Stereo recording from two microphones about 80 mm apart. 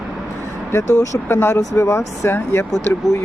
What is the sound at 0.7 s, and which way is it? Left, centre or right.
Speech, left.